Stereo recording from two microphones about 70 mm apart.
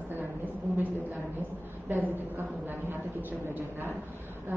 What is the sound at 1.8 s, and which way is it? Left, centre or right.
A woman's voice, right.